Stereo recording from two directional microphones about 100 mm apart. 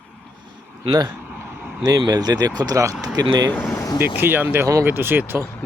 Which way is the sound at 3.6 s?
25° left (ahead or behind).